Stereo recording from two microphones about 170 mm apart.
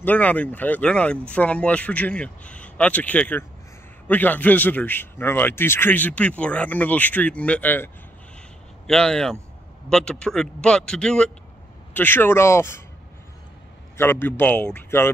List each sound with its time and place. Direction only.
0.0 s a man's voice: 10° left (ahead or behind)
13.9 s a man's voice: 15° left (ahead or behind)